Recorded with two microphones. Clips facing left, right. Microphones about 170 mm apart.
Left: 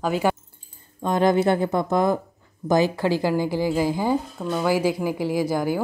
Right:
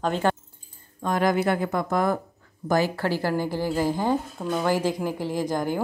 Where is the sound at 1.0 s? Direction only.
25° left (ahead or behind).